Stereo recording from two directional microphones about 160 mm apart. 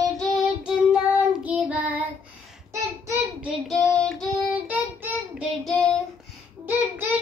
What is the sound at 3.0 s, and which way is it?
Child singing, 20° right (ahead or behind).